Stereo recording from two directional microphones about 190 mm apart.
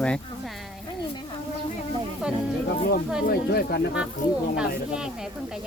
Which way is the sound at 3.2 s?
55° left (ahead or behind).